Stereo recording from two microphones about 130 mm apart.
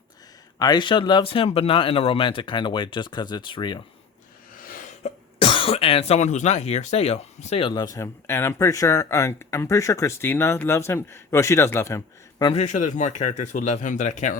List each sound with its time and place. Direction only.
0.6 s speech: 35° left (ahead or behind)
4.5 s a sound: 90° left
5.4 s speech: 40° left (ahead or behind); by 7.6 s 55° left (ahead or behind)
7.6 s speech: 30° left (ahead or behind)
12.5 s a man's voice: 70° left (ahead or behind)